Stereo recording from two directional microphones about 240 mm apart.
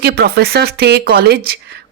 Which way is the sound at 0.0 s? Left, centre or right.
Right.